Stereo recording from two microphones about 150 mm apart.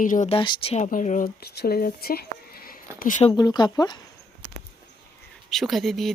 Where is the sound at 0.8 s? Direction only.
55° left (ahead or behind); by 2.8 s 85° left.